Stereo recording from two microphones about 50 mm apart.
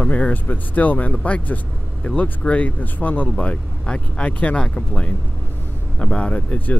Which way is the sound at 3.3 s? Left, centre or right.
Left.